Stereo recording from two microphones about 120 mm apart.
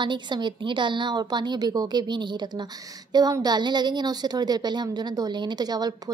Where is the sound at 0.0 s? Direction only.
40° right (ahead or behind).